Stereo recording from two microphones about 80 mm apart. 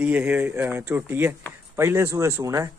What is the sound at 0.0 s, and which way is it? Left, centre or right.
A man's voice, centre.